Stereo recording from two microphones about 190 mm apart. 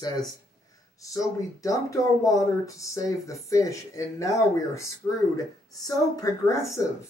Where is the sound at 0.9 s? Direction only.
15° left (ahead or behind).